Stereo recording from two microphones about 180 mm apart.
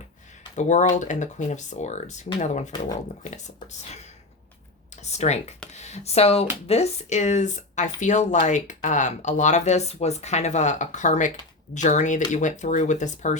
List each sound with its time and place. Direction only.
0.5 s speech: 40° left (ahead or behind)
5.0 s speech: 40° left (ahead or behind)